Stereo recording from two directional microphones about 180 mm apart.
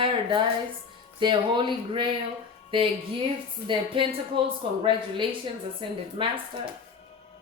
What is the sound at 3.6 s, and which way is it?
A woman's voice, 30° right (ahead or behind).